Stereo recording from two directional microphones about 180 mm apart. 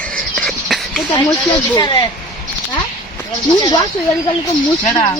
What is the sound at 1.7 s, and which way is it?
Speech, 20° left (ahead or behind).